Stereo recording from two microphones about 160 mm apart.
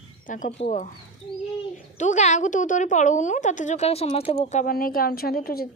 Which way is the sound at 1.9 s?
50° left (ahead or behind).